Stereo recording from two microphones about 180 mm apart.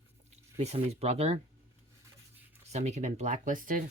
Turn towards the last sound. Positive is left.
turn(degrees=-50)  # may be behind; listen again after turning